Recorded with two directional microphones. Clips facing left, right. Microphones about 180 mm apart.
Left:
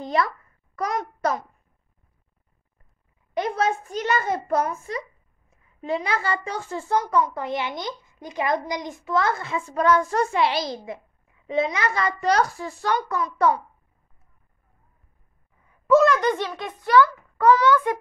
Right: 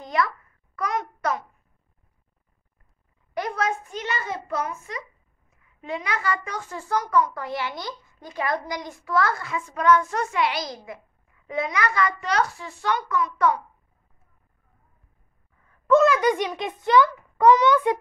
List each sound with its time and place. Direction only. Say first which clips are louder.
0.0 s babbling: left 2 dB; 30° left (ahead or behind)
0.7 s a child's voice: left 1 dB; 35° left (ahead or behind)
3.3 s a child's voice: left 3 dB; 25° left (ahead or behind)
3.9 s a child's voice: left 6 dB; 45° left (ahead or behind)
15.9 s a child's voice: even; centre (ahead or behind); by 17.9 s 20° right (ahead or behind)